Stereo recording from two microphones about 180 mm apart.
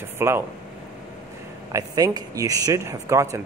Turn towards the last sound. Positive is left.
turn(degrees=-15)  # may be behind; listen again after turning